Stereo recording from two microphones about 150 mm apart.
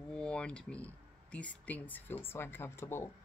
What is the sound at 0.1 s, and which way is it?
Speech, 5° left (ahead or behind).